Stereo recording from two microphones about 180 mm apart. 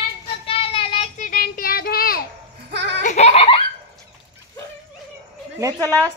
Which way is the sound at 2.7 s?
70° right (ahead or behind).